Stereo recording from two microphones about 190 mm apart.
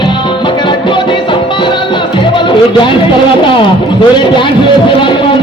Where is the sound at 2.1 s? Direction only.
25° left (ahead or behind).